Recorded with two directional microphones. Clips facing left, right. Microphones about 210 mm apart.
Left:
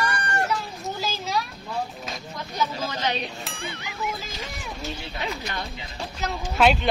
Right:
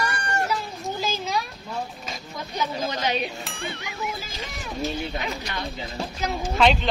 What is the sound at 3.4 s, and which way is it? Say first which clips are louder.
Speech: right 1 dB; centre (ahead or behind).